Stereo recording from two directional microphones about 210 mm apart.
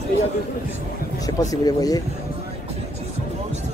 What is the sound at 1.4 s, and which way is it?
Speech, 15° left (ahead or behind).